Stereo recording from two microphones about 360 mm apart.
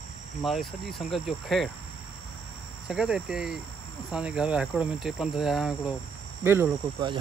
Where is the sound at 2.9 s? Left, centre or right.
Centre.